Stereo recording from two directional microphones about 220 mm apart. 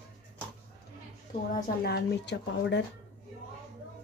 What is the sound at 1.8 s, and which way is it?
Speech, 50° left (ahead or behind).